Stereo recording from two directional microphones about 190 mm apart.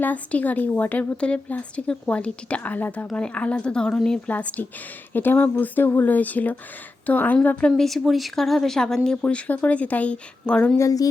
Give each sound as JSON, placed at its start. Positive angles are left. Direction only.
{"t": 0.0, "sound": "speech", "side_deg": 10}
{"t": 10.8, "sound": "speech", "side_deg": 20}